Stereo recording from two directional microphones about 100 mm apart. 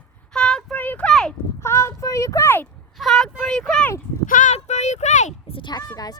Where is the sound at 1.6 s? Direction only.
25° left (ahead or behind).